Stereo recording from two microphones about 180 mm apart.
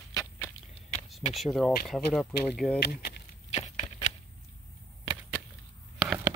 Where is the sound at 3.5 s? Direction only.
40° left (ahead or behind).